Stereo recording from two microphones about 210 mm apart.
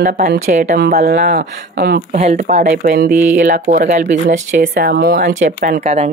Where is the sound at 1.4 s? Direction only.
45° right (ahead or behind).